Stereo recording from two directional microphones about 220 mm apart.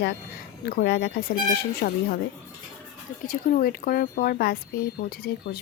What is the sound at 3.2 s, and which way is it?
Speech, 40° left (ahead or behind).